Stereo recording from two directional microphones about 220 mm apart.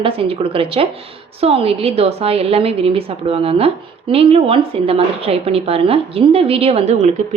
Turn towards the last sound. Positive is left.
turn(degrees=-30)  # may be behind; listen again after turning